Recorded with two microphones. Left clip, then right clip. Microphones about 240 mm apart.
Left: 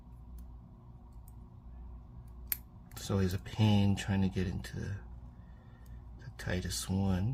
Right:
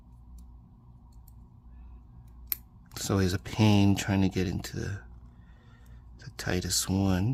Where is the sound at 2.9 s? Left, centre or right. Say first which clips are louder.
Right 7 dB; right.